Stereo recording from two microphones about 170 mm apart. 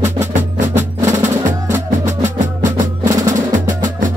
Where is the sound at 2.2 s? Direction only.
45° right (ahead or behind).